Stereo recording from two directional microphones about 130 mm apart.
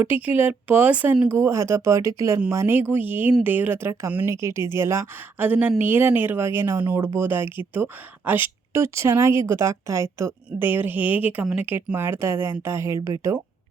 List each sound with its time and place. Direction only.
0.0 s a woman's voice: 15° right (ahead or behind)